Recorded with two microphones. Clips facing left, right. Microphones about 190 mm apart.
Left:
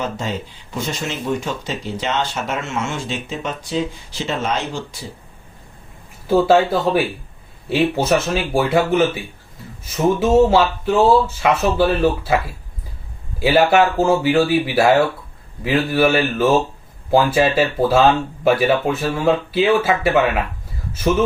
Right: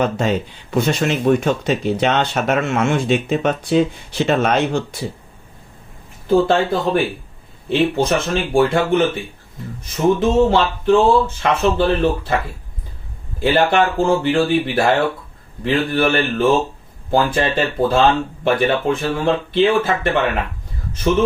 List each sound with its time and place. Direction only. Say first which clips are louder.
0.0 s speech: right 6 dB; 60° right (ahead or behind)
6.2 s speech: left 1 dB; 5° left (ahead or behind)
10.2 s speech: left 5 dB; 5° left (ahead or behind)
13.4 s speech: left 1 dB; 5° left (ahead or behind)